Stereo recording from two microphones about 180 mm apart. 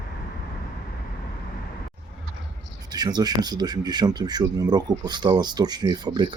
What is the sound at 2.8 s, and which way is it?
Speech, 20° right (ahead or behind).